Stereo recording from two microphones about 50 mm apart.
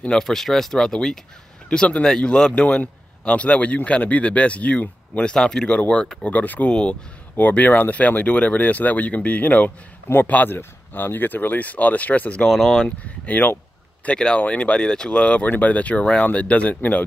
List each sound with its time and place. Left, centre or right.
0.1 s speech: centre; by 6.7 s left
6.7 s speech: centre
7.3 s speech: left
12.4 s speech: centre
12.8 s speech: left
15.4 s speech: left